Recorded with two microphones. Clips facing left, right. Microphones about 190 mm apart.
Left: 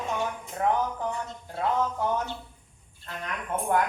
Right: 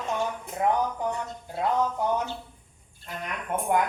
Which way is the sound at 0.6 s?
15° right (ahead or behind).